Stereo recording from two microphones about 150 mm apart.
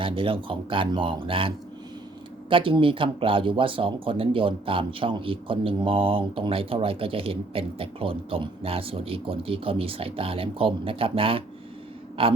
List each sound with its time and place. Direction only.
0.0 s speech: 35° right (ahead or behind)